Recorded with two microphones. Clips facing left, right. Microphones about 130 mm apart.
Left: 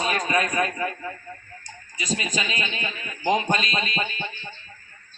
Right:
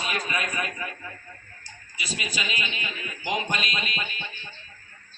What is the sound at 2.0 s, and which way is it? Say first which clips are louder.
A man's voice: left 5 dB; 35° left (ahead or behind).